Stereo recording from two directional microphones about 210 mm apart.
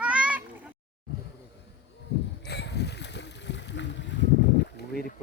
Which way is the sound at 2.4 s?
55° left (ahead or behind).